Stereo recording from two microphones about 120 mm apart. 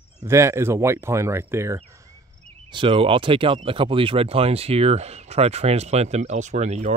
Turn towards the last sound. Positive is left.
turn(degrees=-70)  # may be behind; listen again after turning